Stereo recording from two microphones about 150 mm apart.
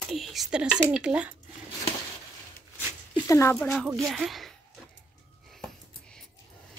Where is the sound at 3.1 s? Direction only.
20° left (ahead or behind).